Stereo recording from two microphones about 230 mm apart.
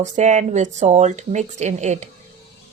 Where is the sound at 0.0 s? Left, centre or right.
Right.